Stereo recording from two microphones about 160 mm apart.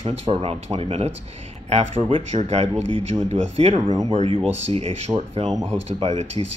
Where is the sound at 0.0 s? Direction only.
40° right (ahead or behind).